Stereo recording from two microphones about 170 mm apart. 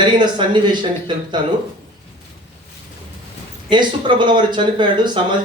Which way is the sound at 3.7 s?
25° right (ahead or behind).